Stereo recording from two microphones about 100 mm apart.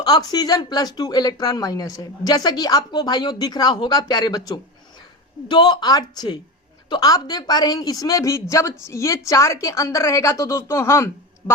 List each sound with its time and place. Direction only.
0.0 s speech: 45° left (ahead or behind); by 11.5 s 25° left (ahead or behind)